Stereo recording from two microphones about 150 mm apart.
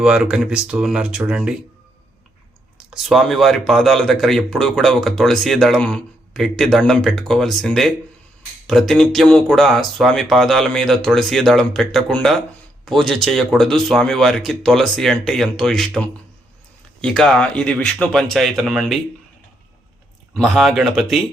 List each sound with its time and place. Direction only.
0.0 s speech: 5° right (ahead or behind)
2.9 s speech: centre (ahead or behind)
20.3 s speech: centre (ahead or behind)